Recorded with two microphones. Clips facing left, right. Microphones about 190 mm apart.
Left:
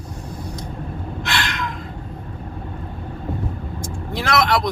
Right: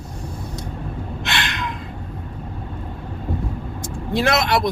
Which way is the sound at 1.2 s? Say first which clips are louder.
Left 1 dB; 20° right (ahead or behind).